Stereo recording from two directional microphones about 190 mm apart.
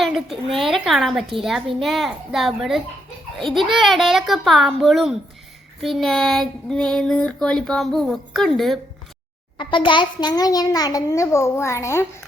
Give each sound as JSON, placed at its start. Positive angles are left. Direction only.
{"t": 0.0, "sound": "speech", "side_deg": 0}
{"t": 9.6, "sound": "a child's voice", "side_deg": 25}